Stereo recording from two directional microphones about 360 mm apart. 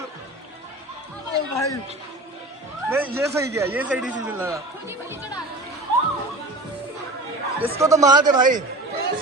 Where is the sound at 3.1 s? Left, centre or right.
Centre.